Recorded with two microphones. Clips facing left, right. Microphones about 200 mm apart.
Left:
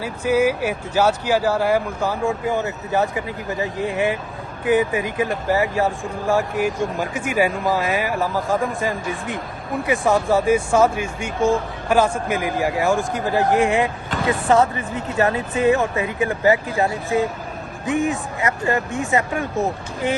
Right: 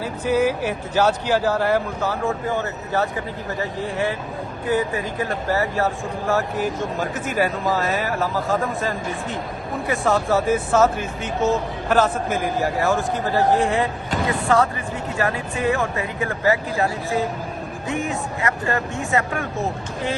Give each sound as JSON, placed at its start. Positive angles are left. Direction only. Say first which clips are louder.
{"t": 0.0, "sound": "speech", "louder": "left 1 dB", "side_deg": 10}